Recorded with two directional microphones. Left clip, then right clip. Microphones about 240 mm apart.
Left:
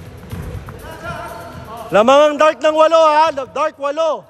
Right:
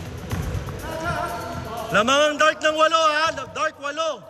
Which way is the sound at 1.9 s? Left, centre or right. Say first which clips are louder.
Left 8 dB; left.